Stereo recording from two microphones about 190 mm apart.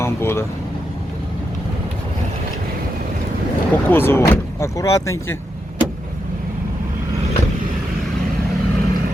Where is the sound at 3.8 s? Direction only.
10° left (ahead or behind).